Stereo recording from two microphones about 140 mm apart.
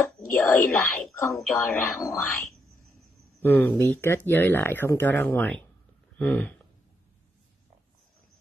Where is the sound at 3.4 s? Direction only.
15° left (ahead or behind).